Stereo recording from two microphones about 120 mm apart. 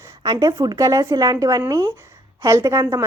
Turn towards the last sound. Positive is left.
turn(degrees=-25)  # may be behind; listen again after turning